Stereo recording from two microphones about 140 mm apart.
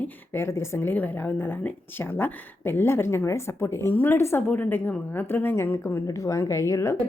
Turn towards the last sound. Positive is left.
turn(degrees=20)  # may be behind; listen again after turning